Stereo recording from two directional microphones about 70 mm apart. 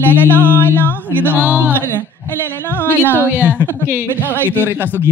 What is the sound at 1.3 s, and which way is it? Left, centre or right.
Speech, right.